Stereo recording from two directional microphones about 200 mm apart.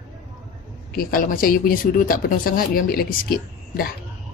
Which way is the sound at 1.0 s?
45° left (ahead or behind).